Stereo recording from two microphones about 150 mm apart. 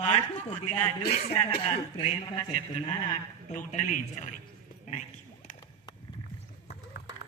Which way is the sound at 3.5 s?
55° left (ahead or behind).